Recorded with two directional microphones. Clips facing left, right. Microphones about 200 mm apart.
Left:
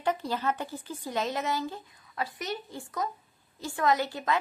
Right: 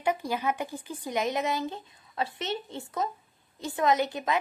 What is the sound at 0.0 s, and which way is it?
A woman's voice, 10° right (ahead or behind).